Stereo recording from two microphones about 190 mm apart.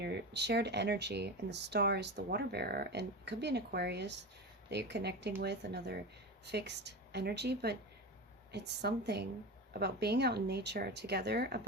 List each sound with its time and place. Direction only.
0.0 s speech: 60° right (ahead or behind)